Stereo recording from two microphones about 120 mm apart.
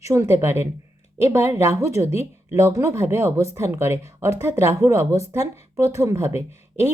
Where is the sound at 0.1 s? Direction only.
20° right (ahead or behind).